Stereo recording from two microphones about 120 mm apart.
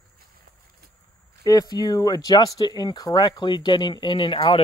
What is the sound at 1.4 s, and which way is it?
Speech, 30° left (ahead or behind).